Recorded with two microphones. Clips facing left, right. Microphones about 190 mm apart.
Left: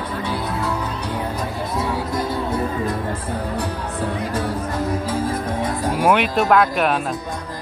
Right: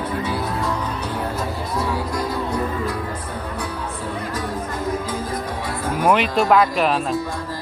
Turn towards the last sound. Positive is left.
turn(degrees=0)  # may be behind; listen again after turning